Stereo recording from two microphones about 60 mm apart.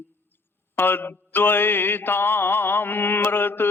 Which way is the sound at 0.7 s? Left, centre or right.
Left.